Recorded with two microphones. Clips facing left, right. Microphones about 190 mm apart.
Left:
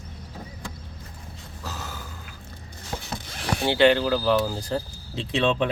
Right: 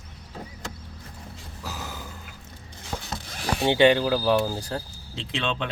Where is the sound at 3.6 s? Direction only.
15° right (ahead or behind).